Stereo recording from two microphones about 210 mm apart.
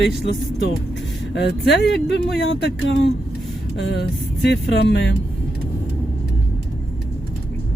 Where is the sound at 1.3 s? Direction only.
55° left (ahead or behind).